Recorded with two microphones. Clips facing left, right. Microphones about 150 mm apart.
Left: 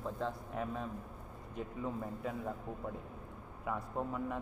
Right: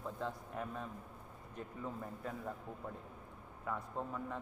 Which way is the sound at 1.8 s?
15° left (ahead or behind).